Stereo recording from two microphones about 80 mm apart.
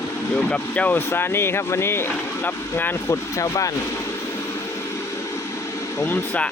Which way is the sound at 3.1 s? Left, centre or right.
Left.